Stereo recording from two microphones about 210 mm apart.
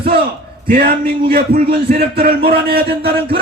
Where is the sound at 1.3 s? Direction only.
45° right (ahead or behind).